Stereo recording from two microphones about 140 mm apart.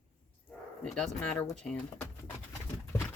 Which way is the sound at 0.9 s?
5° left (ahead or behind).